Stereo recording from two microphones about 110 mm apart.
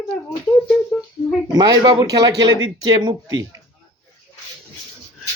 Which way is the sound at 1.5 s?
35° right (ahead or behind).